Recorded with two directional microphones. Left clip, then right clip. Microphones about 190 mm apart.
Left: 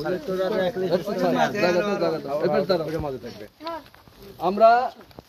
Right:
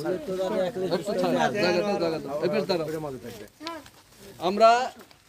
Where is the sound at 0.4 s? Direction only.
25° right (ahead or behind).